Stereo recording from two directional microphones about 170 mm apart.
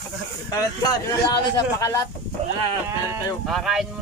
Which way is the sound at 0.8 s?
20° left (ahead or behind).